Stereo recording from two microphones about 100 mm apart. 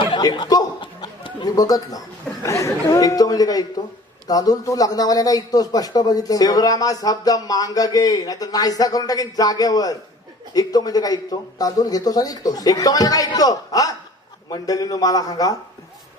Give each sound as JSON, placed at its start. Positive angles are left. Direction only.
{"t": 0.2, "sound": "a man's voice", "side_deg": 40}
{"t": 0.8, "sound": "chicken", "side_deg": 50}
{"t": 2.4, "sound": "a man's voice", "side_deg": 30}